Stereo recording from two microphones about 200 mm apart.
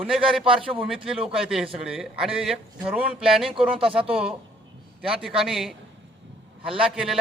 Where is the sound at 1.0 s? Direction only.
5° right (ahead or behind).